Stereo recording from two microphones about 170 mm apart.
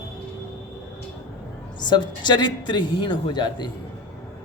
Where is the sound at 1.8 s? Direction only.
25° left (ahead or behind).